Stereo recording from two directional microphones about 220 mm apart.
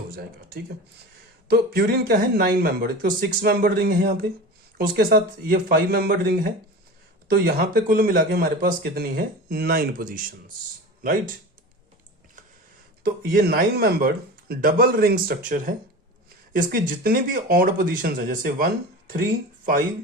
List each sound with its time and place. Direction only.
1.5 s speech: 45° right (ahead or behind)
13.0 s speech: 45° right (ahead or behind)